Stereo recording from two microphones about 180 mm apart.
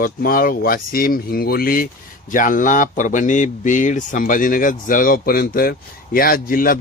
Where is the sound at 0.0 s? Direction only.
55° left (ahead or behind).